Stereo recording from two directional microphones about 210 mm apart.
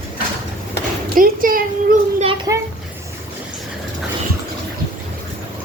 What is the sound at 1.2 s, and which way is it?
Speech, 40° right (ahead or behind).